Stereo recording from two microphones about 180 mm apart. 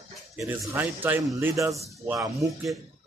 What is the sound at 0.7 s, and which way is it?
Speech, 10° right (ahead or behind).